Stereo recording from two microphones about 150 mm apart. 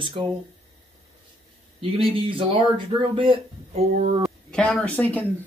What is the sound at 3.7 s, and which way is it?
Speech, 45° right (ahead or behind).